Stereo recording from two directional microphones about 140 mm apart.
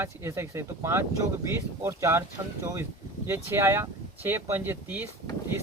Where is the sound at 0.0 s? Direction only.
15° right (ahead or behind).